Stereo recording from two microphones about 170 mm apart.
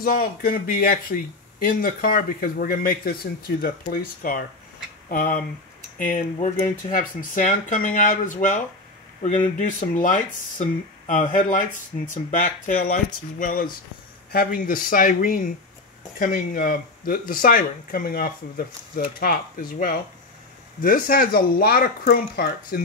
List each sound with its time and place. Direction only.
0.0 s speech: 60° left (ahead or behind)
9.6 s speech: 50° left (ahead or behind)